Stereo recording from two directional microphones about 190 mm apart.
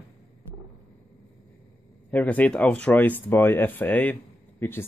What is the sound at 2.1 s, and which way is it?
Speech, 10° left (ahead or behind).